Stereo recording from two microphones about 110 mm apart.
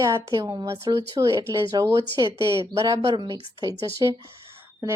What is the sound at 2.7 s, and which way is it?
Speech, 30° right (ahead or behind).